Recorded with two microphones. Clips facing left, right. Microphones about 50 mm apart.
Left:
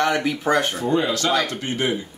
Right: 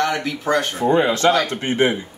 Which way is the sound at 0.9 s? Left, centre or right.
Right.